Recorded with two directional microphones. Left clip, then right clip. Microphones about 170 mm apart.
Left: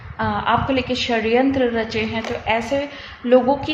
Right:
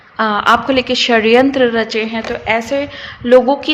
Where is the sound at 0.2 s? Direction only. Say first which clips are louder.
Right 7 dB; 50° right (ahead or behind).